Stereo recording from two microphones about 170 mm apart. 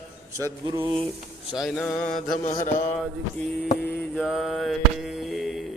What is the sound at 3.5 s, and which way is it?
Mantra, 70° left (ahead or behind).